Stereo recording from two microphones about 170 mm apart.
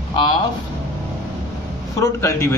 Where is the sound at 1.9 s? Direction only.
20° left (ahead or behind).